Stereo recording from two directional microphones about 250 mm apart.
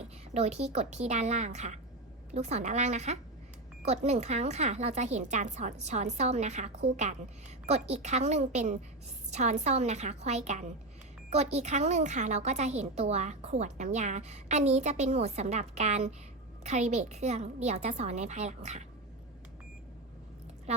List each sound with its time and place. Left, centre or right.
0.3 s a woman's voice: right